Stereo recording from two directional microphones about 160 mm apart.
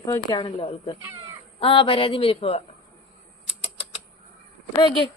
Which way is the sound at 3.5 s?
35° left (ahead or behind).